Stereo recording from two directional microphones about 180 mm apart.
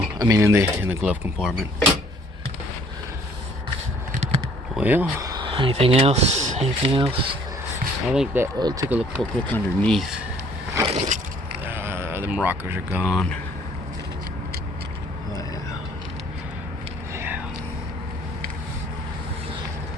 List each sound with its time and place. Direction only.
0.2 s speech: 15° right (ahead or behind); by 1.9 s centre (ahead or behind)
4.8 s speech: 10° right (ahead or behind)
5.3 s speech: 25° right (ahead or behind)
6.8 s speech: 30° right (ahead or behind)
8.1 s speech: 5° right (ahead or behind)
8.5 s speech: 20° right (ahead or behind)
8.9 s speech: 5° right (ahead or behind)
9.3 s speech: 5° left (ahead or behind)
10.8 s a sound: 35° right (ahead or behind)
11.6 s a sound: 10° right (ahead or behind)
17.2 s a sound: 10° right (ahead or behind)